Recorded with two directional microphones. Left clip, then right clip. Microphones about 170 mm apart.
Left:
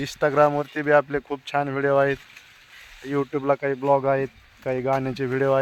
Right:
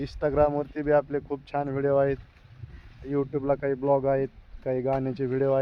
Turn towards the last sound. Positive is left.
turn(degrees=25)  # may be behind; listen again after turning